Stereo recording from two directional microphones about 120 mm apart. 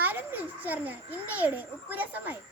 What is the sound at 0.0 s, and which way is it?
A child's voice, 15° right (ahead or behind).